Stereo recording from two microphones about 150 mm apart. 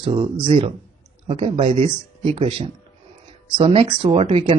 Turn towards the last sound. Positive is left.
turn(degrees=-40)  # may be behind; listen again after turning